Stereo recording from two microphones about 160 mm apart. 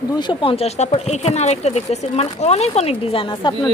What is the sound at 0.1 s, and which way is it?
A woman's voice, 30° left (ahead or behind).